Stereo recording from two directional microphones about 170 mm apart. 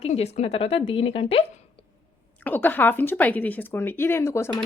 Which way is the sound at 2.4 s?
10° left (ahead or behind).